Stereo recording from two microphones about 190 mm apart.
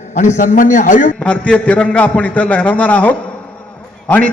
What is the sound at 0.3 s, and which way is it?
Speech, 45° left (ahead or behind).